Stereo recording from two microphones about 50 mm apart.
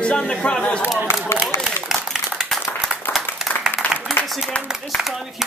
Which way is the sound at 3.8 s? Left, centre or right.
Left.